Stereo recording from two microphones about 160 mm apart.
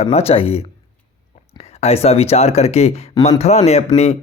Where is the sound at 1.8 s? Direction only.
40° left (ahead or behind).